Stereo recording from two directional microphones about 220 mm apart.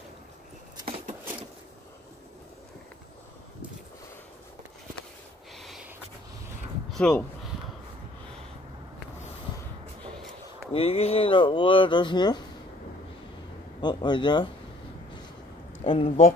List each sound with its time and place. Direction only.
0.7 s a sound: 25° right (ahead or behind)
6.9 s speech: 5° left (ahead or behind)
10.1 s a sound: centre (ahead or behind)
10.7 s speech: 25° left (ahead or behind)
13.7 s speech: 20° left (ahead or behind)
15.8 s speech: 25° left (ahead or behind)